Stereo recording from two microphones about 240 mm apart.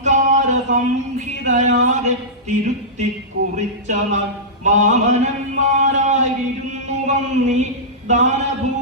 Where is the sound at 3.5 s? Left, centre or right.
Right.